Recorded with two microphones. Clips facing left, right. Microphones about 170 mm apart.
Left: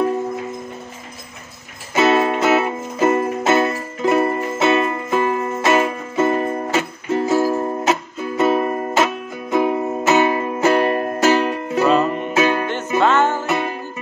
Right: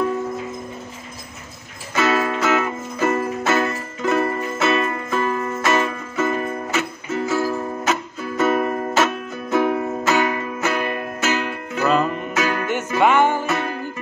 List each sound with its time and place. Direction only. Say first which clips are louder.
2.0 s music: left 4 dB; 25° left (ahead or behind)
8.4 s music: left 2 dB; 15° left (ahead or behind)
13.0 s music: right 1 dB; 10° right (ahead or behind)
13.5 s music: left 2 dB; 15° left (ahead or behind)